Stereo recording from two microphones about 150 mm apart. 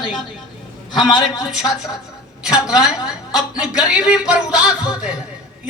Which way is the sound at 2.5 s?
5° right (ahead or behind).